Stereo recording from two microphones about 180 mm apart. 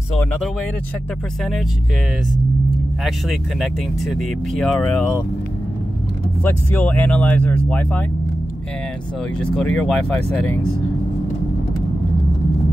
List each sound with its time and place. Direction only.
0.2 s speech: 10° left (ahead or behind)
3.3 s speech: centre (ahead or behind)
6.4 s speech: 10° left (ahead or behind)
9.4 s speech: 5° left (ahead or behind)